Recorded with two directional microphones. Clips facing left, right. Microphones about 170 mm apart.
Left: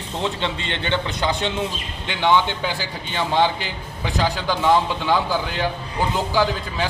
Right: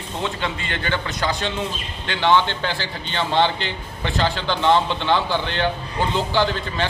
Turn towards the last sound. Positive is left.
turn(degrees=5)  # may be behind; listen again after turning